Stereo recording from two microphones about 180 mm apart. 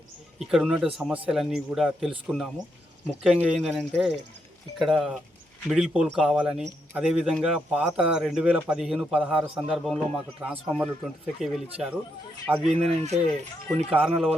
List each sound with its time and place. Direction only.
0.3 s a man's voice: centre (ahead or behind)
12.6 s speech: 35° right (ahead or behind)
13.7 s a man's voice: 5° right (ahead or behind)